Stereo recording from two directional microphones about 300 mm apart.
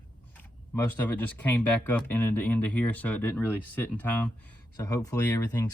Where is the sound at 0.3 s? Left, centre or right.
Centre.